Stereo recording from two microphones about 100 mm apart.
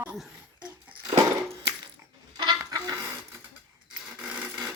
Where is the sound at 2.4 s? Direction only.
40° right (ahead or behind).